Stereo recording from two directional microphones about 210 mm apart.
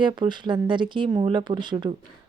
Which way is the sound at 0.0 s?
20° right (ahead or behind).